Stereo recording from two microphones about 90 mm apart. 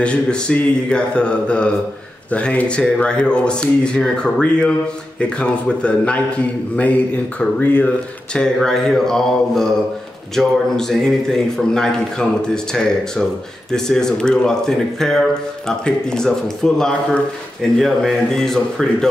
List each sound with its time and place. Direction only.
0.0 s a man's voice: 10° left (ahead or behind)
7.3 s a man's voice: 15° left (ahead or behind)
8.4 s a man's voice: 5° left (ahead or behind)